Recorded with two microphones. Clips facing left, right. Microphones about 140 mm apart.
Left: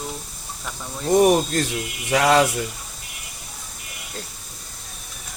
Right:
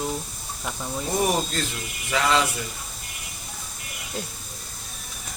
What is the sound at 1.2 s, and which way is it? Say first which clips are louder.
Speech: left 6 dB; 50° left (ahead or behind).